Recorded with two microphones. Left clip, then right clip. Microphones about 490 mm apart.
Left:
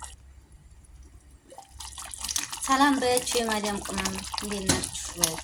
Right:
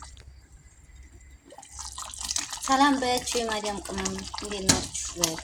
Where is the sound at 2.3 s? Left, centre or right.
Left.